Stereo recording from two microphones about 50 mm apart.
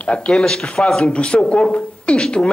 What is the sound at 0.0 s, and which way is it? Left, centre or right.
Speech, left.